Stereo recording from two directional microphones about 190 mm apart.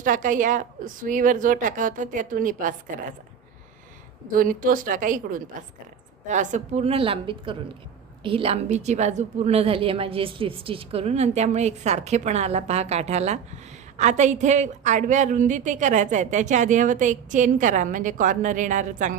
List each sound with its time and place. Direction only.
0.0 s a woman's voice: 45° right (ahead or behind)
4.3 s a woman's voice: 45° right (ahead or behind)